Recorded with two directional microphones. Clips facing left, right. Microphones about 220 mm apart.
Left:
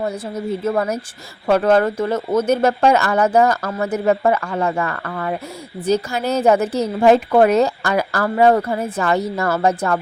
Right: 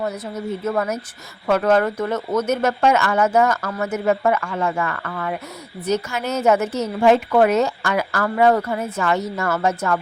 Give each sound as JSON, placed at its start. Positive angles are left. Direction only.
{"t": 0.0, "sound": "a woman's voice", "side_deg": 30}